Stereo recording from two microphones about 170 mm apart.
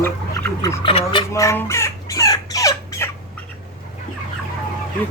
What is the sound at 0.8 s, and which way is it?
Speech, 35° left (ahead or behind).